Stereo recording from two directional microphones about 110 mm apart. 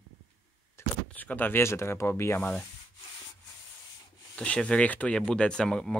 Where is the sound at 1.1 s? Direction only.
15° left (ahead or behind).